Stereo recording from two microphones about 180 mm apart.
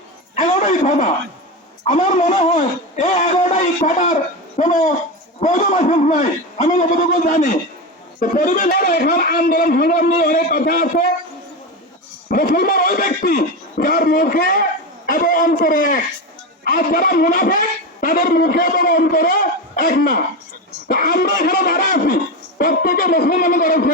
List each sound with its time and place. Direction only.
0.3 s a sound: 40° left (ahead or behind)
1.8 s a man's voice: 40° left (ahead or behind)
12.3 s a man's voice: 50° left (ahead or behind)